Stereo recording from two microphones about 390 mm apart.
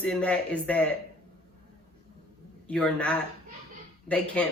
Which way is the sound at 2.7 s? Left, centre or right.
Centre.